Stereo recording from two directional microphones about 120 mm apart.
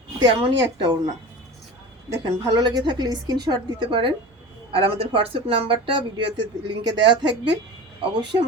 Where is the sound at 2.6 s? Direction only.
40° right (ahead or behind).